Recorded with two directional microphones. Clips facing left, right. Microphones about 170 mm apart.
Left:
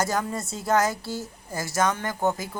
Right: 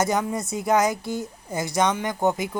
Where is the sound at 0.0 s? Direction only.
20° right (ahead or behind).